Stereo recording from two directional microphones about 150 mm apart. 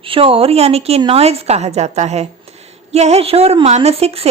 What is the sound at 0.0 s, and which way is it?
A woman's voice, 40° right (ahead or behind).